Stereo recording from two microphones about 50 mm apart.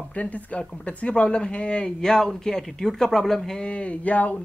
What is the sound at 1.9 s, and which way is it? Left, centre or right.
Speech, centre.